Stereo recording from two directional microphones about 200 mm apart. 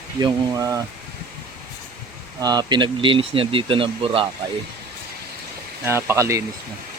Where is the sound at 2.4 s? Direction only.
20° right (ahead or behind).